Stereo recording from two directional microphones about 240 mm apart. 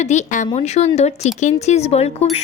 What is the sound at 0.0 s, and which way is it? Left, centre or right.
Speech, left.